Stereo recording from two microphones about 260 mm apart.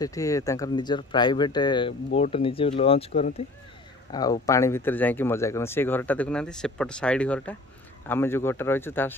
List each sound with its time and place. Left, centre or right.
0.0 s speech: centre